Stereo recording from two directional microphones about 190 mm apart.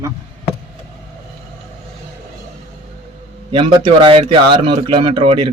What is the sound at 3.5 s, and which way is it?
Speech, 25° right (ahead or behind).